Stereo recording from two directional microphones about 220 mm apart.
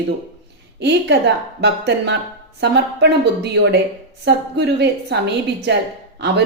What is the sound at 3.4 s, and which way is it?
A woman's voice, 50° right (ahead or behind).